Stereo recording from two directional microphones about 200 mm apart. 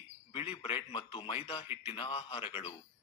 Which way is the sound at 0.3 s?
25° left (ahead or behind).